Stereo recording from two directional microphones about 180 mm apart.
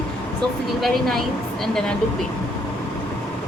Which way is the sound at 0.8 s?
Centre (ahead or behind).